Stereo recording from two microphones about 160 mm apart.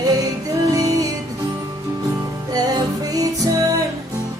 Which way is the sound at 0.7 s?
20° right (ahead or behind).